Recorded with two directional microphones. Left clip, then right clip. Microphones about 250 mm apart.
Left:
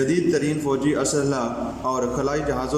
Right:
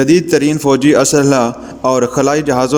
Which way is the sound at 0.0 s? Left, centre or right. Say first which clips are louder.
Right 10 dB; right.